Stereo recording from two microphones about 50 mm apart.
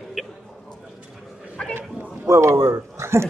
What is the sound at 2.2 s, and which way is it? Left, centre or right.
Speech, right.